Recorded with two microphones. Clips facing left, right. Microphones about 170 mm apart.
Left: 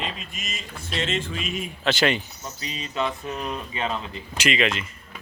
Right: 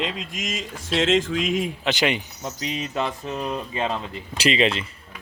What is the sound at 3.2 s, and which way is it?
Speech, 30° right (ahead or behind).